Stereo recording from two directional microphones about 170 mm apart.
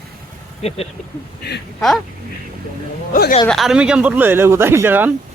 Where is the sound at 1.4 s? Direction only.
75° left (ahead or behind).